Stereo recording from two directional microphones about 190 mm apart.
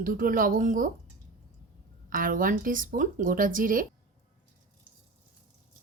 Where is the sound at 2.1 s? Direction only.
45° right (ahead or behind).